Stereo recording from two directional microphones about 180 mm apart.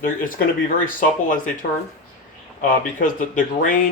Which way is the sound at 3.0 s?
50° left (ahead or behind).